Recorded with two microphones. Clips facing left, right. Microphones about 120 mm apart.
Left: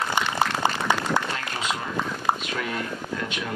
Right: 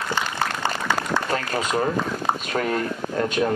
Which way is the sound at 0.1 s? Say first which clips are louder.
Right 1 dB; 15° left (ahead or behind).